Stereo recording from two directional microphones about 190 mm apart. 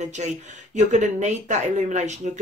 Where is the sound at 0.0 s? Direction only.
40° right (ahead or behind).